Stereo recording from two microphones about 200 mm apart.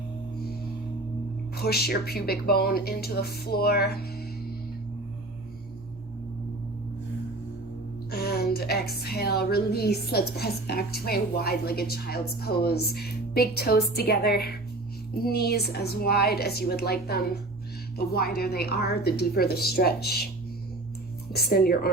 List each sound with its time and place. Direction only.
1.5 s a woman's voice: 50° left (ahead or behind)
8.1 s a woman's voice: 50° left (ahead or behind)
21.3 s a woman's voice: 50° left (ahead or behind)